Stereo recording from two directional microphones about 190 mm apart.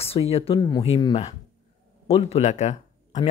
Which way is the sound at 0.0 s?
30° left (ahead or behind).